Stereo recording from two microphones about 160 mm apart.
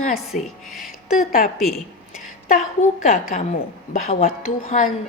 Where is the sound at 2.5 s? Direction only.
50° left (ahead or behind).